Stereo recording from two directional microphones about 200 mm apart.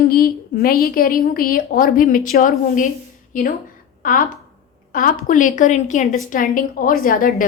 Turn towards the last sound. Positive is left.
turn(degrees=45)  # may be behind; listen again after turning